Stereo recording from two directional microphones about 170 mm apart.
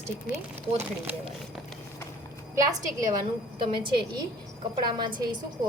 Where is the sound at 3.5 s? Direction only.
30° right (ahead or behind).